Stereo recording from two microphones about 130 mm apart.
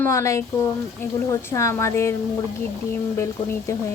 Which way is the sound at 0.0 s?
20° left (ahead or behind).